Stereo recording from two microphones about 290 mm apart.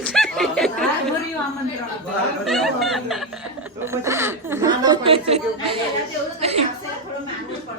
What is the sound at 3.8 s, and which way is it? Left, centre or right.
Chuckle, centre.